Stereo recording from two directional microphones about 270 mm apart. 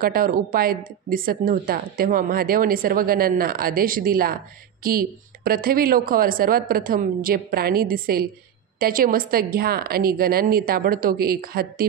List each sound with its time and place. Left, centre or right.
0.0 s a woman's voice: right